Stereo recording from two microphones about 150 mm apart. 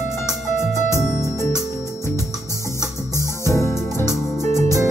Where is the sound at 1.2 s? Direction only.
20° left (ahead or behind).